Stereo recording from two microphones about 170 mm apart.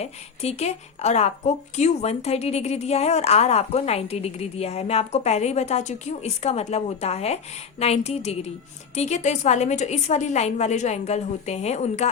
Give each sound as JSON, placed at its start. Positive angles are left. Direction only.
{"t": 0.0, "sound": "speech", "side_deg": 40}